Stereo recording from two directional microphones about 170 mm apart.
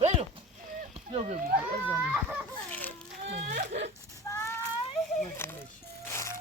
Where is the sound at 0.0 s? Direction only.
40° right (ahead or behind).